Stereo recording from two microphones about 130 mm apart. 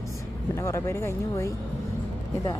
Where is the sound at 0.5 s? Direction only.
20° left (ahead or behind).